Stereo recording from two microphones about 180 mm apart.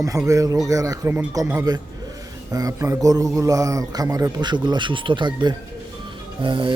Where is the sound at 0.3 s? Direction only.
20° right (ahead or behind).